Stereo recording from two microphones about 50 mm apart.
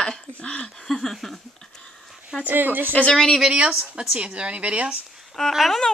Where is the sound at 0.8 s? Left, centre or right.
Centre.